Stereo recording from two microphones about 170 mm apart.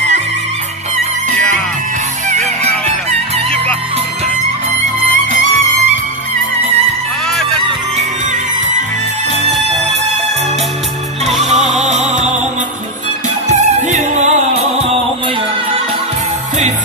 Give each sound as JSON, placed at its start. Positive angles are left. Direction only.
{"t": 2.2, "sound": "music", "side_deg": -45}
{"t": 11.2, "sound": "music", "side_deg": -40}
{"t": 13.5, "sound": "music", "side_deg": -45}